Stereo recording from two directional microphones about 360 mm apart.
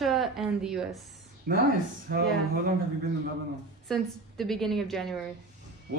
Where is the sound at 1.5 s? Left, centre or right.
Right.